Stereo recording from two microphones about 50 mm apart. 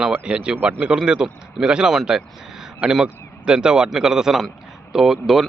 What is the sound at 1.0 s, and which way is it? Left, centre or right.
Speech, centre.